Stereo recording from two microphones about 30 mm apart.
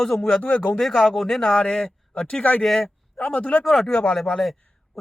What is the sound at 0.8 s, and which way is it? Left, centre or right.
Speech, centre.